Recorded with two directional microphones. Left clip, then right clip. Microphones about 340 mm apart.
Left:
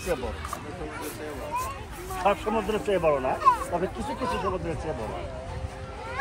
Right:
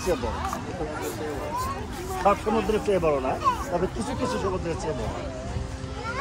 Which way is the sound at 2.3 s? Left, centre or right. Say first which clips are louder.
Right 2 dB; left.